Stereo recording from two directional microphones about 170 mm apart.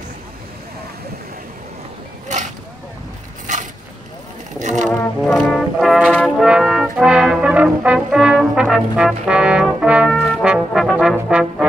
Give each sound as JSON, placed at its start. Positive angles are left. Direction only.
{"t": 2.2, "sound": "a sound", "side_deg": -45}
{"t": 3.5, "sound": "vehicle", "side_deg": -45}
{"t": 4.6, "sound": "music", "side_deg": -45}
{"t": 5.2, "sound": "brass instrument", "side_deg": 0}
{"t": 11.1, "sound": "trombone", "side_deg": -5}